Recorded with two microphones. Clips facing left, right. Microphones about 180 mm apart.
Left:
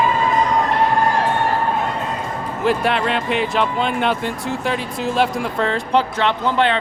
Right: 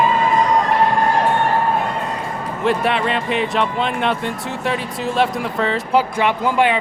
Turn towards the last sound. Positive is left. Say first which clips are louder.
# right 1 dB
turn(degrees=-10)  # may be behind; listen again after turning